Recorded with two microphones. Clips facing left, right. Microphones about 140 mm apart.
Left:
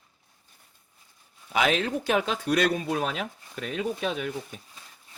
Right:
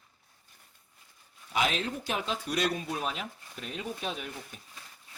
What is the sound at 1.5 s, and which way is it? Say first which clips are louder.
Speech: left 5 dB; 70° left (ahead or behind).